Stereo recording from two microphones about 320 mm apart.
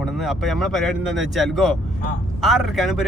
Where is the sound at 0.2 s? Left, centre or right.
Centre.